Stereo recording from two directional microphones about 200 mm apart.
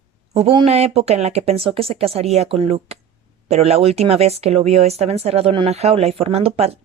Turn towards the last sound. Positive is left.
turn(degrees=-30)  # may be behind; listen again after turning